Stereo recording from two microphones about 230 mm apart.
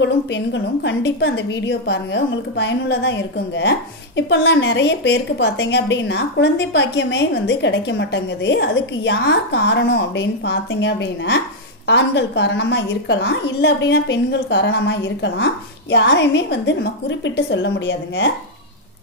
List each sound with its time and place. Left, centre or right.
0.0 s a woman's voice: left